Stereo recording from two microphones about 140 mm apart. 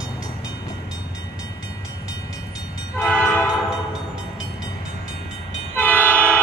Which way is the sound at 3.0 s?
10° left (ahead or behind).